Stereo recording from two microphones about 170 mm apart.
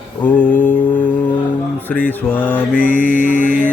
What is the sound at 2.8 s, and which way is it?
Mantra, 50° left (ahead or behind).